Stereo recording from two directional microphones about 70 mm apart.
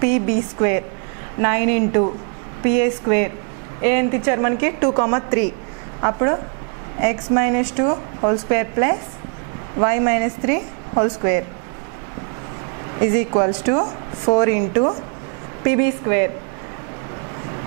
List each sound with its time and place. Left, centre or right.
0.0 s a woman's voice: centre
13.0 s a woman's voice: centre